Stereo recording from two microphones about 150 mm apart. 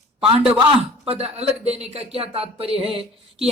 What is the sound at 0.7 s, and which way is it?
Speech, 40° right (ahead or behind).